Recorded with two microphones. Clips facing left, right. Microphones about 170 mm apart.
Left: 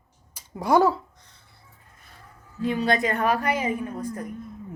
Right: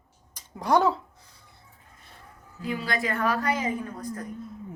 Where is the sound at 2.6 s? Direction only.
20° left (ahead or behind).